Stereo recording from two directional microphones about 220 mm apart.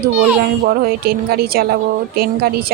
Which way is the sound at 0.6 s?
45° right (ahead or behind).